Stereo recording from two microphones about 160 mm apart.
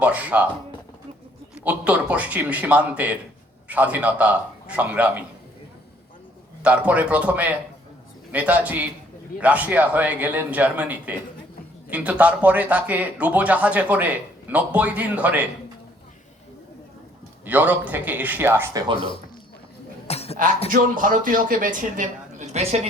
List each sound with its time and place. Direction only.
0.0 s speech: 10° right (ahead or behind)
1.5 s speech: 10° right (ahead or behind)
6.6 s speech: 10° right (ahead or behind)
17.4 s speech: 10° right (ahead or behind)
18.9 s a man's voice: 30° left (ahead or behind)
20.1 s a sound: 40° left (ahead or behind)
20.7 s speech: 55° right (ahead or behind); by 22.9 s 40° right (ahead or behind)